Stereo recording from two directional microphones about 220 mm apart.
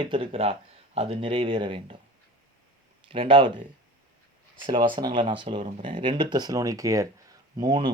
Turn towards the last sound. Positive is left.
turn(degrees=-20)  # may be behind; listen again after turning